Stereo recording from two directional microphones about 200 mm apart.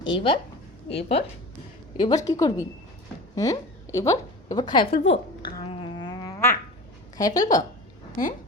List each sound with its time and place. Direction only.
0.0 s a woman's voice: 25° left (ahead or behind)
5.5 s a sound: 25° left (ahead or behind)
7.2 s a woman's voice: 20° left (ahead or behind)